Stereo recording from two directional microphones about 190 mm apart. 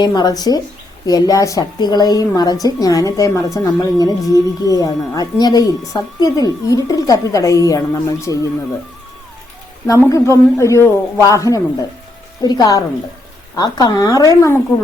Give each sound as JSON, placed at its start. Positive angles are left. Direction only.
{"t": 0.0, "sound": "a woman's voice", "side_deg": 20}
{"t": 9.8, "sound": "a woman's voice", "side_deg": 15}